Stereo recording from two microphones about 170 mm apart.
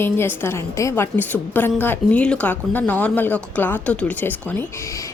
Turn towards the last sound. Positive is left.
turn(degrees=20)  # may be behind; listen again after turning